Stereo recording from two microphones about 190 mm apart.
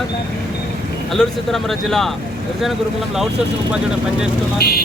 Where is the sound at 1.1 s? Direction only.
Centre (ahead or behind).